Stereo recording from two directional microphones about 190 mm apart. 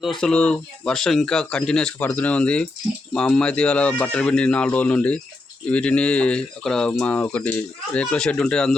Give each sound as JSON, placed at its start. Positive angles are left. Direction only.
{"t": 0.2, "sound": "speech", "side_deg": 5}